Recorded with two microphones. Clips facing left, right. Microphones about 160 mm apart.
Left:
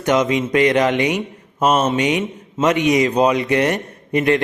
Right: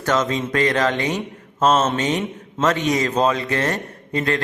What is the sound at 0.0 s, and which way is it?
A man's voice, 15° left (ahead or behind).